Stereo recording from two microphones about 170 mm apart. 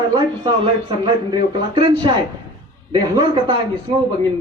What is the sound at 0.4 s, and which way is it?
A man's voice, 30° right (ahead or behind).